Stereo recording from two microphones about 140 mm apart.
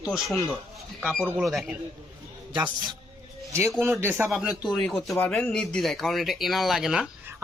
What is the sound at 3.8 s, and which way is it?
Speech, 15° right (ahead or behind).